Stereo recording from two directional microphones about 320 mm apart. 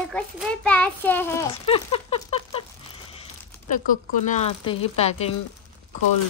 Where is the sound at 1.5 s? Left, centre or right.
Centre.